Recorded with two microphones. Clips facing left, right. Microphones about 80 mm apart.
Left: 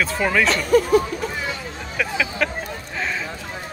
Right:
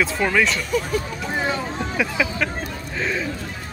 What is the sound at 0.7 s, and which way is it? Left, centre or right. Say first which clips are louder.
Speech: left 9 dB; left.